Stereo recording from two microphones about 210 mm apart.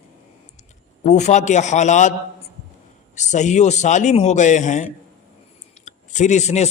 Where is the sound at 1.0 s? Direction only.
35° left (ahead or behind).